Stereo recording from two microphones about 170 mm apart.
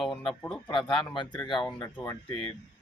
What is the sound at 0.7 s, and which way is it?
Speech, 30° left (ahead or behind).